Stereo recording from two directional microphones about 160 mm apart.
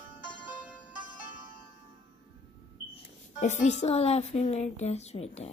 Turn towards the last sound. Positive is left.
turn(degrees=40)  # may be behind; listen again after turning